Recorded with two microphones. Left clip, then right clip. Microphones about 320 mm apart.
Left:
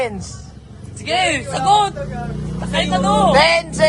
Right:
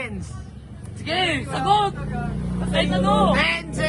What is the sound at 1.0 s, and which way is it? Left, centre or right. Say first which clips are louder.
Speech: left 5 dB; centre.